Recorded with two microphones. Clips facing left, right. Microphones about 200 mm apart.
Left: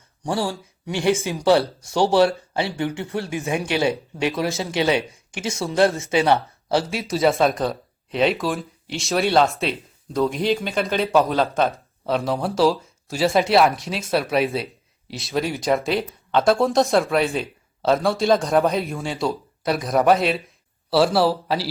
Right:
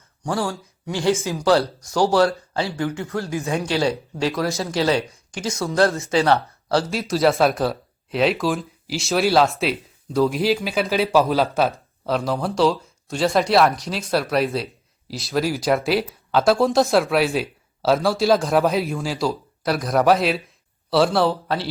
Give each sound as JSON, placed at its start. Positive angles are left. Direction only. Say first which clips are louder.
{"t": 0.2, "sound": "speech", "louder": "even", "side_deg": 30}
{"t": 0.5, "sound": "speech", "louder": "even", "side_deg": 15}
{"t": 1.1, "sound": "speech", "louder": "left 1 dB", "side_deg": 30}
{"t": 6.9, "sound": "speech", "louder": "right 2 dB", "side_deg": 0}